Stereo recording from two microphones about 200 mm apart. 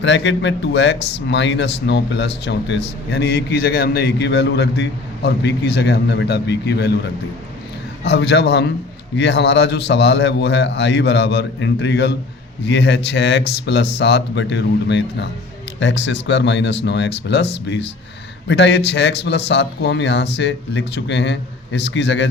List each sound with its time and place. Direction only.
0.0 s a man's voice: 60° left (ahead or behind)
8.0 s a man's voice: 55° left (ahead or behind)